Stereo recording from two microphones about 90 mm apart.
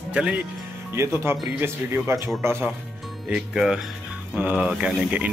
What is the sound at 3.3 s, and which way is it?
Speech, 5° right (ahead or behind).